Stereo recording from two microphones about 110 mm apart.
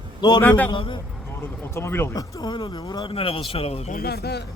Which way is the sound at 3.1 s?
60° left (ahead or behind).